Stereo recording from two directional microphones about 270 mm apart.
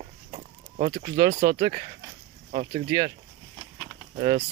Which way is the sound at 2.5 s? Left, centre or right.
Right.